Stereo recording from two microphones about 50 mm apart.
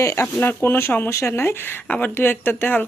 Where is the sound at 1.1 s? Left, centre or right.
Left.